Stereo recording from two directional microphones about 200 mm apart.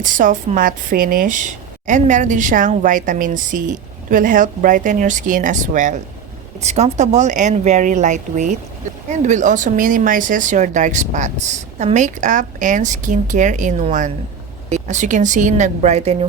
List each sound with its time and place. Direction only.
0.0 s a woman's voice: 40° right (ahead or behind)